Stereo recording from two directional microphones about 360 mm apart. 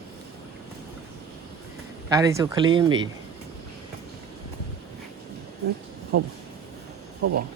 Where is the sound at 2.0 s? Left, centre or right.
Centre.